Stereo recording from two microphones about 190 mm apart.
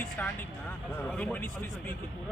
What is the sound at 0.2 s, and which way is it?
Speech, 10° left (ahead or behind).